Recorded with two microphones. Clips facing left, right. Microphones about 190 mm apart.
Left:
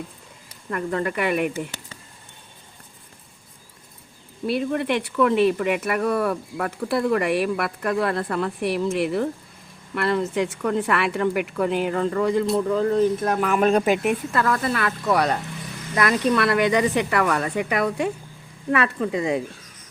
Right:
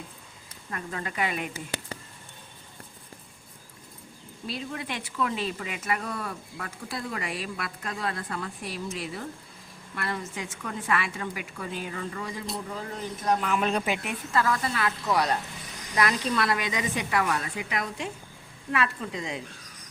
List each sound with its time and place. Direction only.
0.7 s speech: 60° left (ahead or behind)
4.4 s speech: 60° left (ahead or behind)